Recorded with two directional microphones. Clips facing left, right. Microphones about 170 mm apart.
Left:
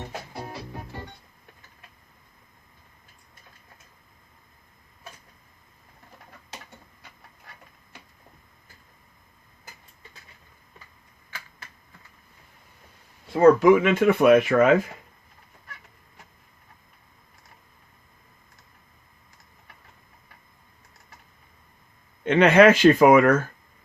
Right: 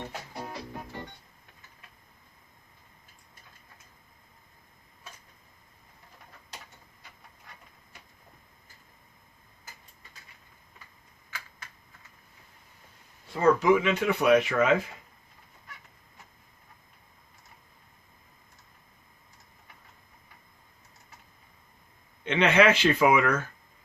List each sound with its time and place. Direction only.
13.4 s speech: 55° left (ahead or behind)
22.2 s speech: 50° left (ahead or behind)